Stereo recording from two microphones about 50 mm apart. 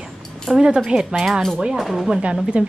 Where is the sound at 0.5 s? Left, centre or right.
Centre.